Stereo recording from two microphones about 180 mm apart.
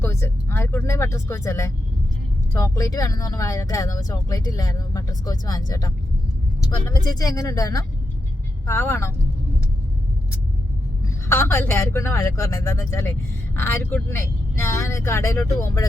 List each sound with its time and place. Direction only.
0.0 s speech: 15° left (ahead or behind)
11.3 s speech: 15° left (ahead or behind)